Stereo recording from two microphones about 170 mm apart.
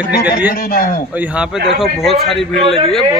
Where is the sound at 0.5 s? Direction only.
60° left (ahead or behind).